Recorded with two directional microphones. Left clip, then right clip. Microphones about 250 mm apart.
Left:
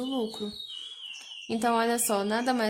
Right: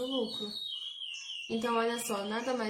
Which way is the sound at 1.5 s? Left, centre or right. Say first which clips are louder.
Left 5 dB; left.